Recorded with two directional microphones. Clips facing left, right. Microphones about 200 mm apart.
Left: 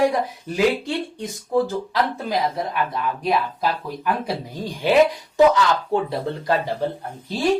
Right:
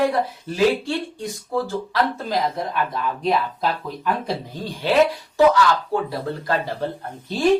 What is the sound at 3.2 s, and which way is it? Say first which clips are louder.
Speech: right 1 dB; 5° left (ahead or behind).